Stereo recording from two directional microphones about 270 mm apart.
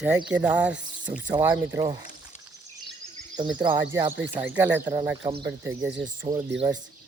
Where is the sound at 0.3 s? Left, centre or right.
Centre.